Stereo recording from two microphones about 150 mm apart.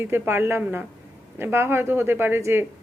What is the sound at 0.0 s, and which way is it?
Speech, 15° right (ahead or behind).